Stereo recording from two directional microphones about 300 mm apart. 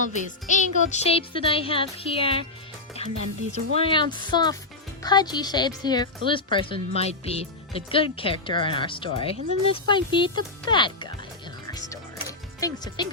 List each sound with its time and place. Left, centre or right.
0.0 s music: left
3.0 s a woman's voice: left
12.5 s speech: centre